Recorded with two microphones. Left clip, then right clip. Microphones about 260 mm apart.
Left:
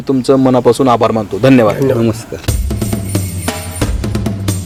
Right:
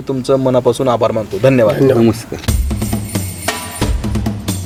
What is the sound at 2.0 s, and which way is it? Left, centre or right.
Speech, right.